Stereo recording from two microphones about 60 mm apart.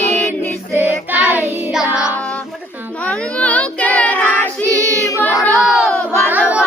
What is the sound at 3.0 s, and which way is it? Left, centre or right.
Child singing, left.